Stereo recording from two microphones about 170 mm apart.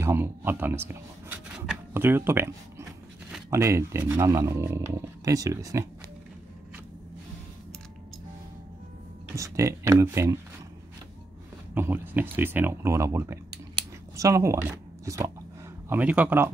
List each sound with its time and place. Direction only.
0.0 s speech: 15° right (ahead or behind)
9.3 s speech: 20° right (ahead or behind)
11.7 s speech: 10° right (ahead or behind)